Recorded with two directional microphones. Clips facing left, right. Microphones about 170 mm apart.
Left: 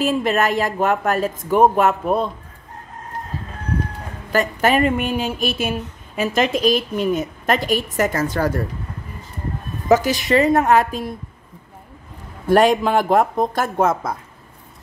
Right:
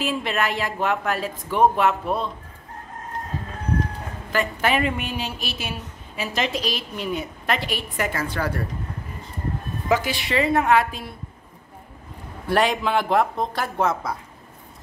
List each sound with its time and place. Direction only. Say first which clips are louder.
0.0 s a woman's voice: left 6 dB; 45° left (ahead or behind)
4.3 s a woman's voice: left 5 dB; 40° left (ahead or behind)
9.8 s a woman's voice: left 7 dB; 40° left (ahead or behind)
12.4 s a woman's voice: left 6 dB; 45° left (ahead or behind)